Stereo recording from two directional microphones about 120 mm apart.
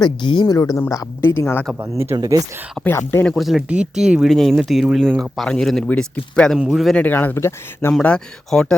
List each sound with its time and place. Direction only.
0.0 s speech: 40° left (ahead or behind); by 1.6 s 20° left (ahead or behind)
1.8 s speech: 20° right (ahead or behind)
2.1 s speech: 35° right (ahead or behind)
2.8 s speech: centre (ahead or behind)
3.1 s speech: 15° left (ahead or behind)
3.3 s speech: centre (ahead or behind)
6.9 s speech: 15° left (ahead or behind)
8.0 s speech: 5° left (ahead or behind)